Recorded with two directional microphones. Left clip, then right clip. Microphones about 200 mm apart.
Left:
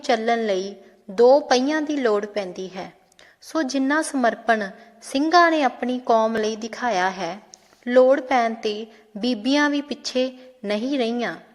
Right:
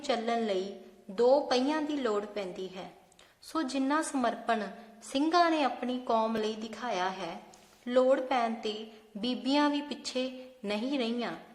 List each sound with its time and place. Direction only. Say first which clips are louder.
0.0 s a woman's voice: left 10 dB; 30° left (ahead or behind)